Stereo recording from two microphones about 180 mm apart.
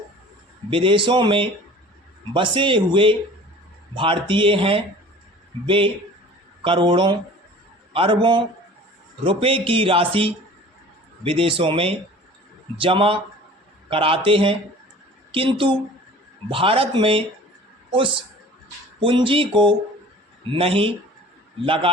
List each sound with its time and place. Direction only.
0.7 s speech: 30° right (ahead or behind)